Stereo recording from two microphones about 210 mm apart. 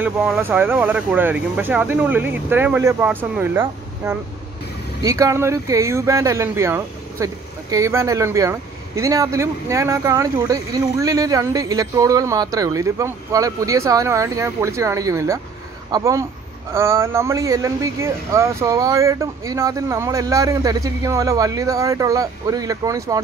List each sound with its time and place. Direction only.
0.0 s speech: 5° right (ahead or behind)